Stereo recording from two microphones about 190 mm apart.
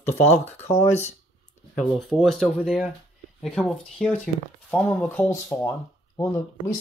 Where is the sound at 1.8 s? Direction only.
Centre (ahead or behind); by 6.2 s 15° left (ahead or behind).